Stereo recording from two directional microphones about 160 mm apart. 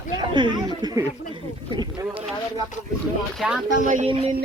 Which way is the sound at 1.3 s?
25° right (ahead or behind).